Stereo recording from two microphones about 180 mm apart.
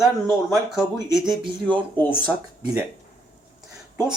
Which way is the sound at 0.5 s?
Centre (ahead or behind).